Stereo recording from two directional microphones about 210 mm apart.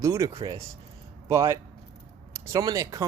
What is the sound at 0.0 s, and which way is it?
Speech, 15° right (ahead or behind).